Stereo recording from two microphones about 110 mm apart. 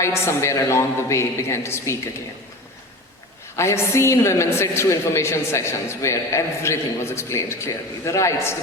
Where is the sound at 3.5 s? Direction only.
25° left (ahead or behind).